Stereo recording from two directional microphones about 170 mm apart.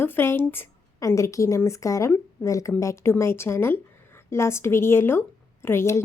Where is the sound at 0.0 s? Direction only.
15° left (ahead or behind).